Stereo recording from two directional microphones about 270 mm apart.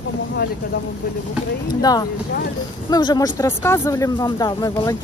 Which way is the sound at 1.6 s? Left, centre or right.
Centre.